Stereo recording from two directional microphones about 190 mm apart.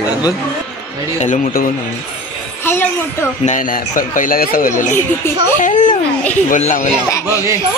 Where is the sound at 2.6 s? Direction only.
10° left (ahead or behind).